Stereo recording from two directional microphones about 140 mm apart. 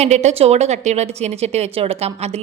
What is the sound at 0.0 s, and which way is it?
Speech, 55° right (ahead or behind).